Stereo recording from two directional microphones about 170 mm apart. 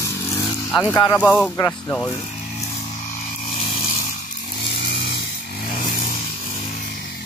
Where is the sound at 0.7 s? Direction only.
10° left (ahead or behind).